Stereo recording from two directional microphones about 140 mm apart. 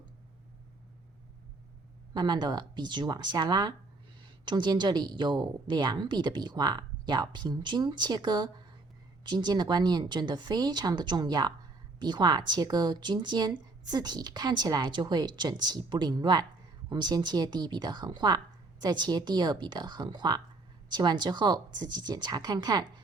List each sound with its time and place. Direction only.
2.1 s a woman's voice: 30° right (ahead or behind)